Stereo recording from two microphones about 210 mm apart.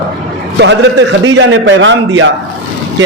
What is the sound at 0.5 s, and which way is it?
A man's voice, 60° right (ahead or behind).